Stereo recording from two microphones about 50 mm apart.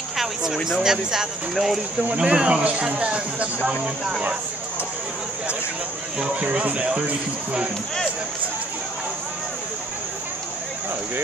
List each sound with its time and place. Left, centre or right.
0.2 s speech: centre
2.1 s speech: centre
3.8 s speech: centre
6.1 s speech: centre